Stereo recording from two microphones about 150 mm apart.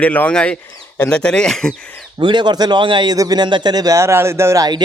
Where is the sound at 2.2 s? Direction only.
30° right (ahead or behind).